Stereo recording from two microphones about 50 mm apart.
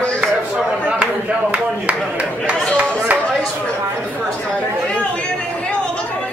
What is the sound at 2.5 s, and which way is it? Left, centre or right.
Speech, centre.